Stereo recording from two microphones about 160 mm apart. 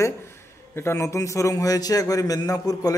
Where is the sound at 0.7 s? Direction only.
15° left (ahead or behind).